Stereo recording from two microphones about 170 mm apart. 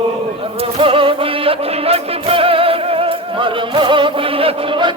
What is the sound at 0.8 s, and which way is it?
Music, 30° right (ahead or behind).